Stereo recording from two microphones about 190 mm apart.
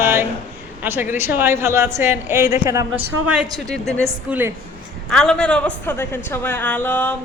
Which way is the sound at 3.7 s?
Centre (ahead or behind).